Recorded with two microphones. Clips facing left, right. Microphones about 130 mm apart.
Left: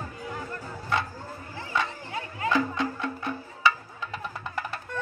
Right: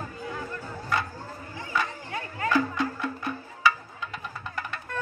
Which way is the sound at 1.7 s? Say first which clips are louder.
Even; 20° left (ahead or behind).